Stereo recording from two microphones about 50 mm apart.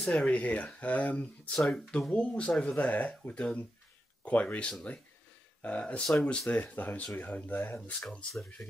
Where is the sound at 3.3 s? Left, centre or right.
Centre.